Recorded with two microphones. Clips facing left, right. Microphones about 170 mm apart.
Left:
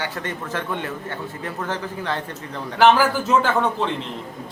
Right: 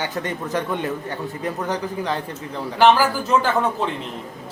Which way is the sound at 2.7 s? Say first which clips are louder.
Even; centre (ahead or behind).